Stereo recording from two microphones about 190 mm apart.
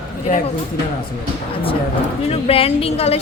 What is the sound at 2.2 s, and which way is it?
Speech, 30° left (ahead or behind).